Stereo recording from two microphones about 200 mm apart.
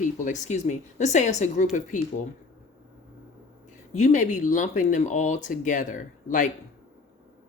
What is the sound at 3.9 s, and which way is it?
Speech, 35° left (ahead or behind).